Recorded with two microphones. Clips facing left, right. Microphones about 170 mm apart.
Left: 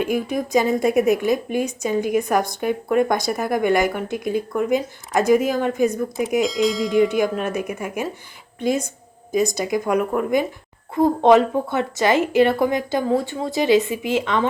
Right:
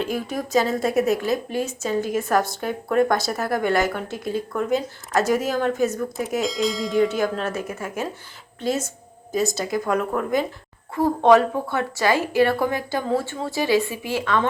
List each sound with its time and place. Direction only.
0.0 s speech: 15° left (ahead or behind)
6.4 s speech: centre (ahead or behind)
7.1 s speech: 15° left (ahead or behind)
9.3 s a woman's voice: 15° left (ahead or behind)